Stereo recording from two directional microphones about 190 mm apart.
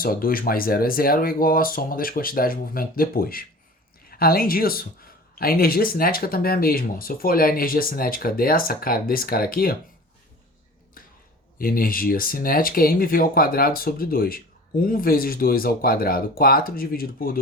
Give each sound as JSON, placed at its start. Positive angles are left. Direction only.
{"t": 0.0, "sound": "speech", "side_deg": 50}
{"t": 11.6, "sound": "speech", "side_deg": 50}